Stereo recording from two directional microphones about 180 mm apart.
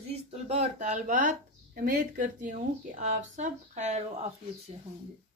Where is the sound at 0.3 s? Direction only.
35° right (ahead or behind).